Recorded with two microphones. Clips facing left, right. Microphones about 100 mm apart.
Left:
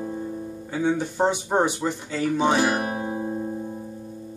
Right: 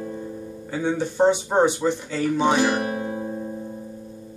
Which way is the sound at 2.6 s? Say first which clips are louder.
Right 1 dB; 40° left (ahead or behind).